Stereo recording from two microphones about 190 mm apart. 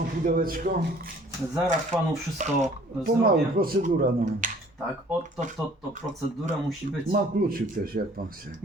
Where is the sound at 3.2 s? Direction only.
50° right (ahead or behind).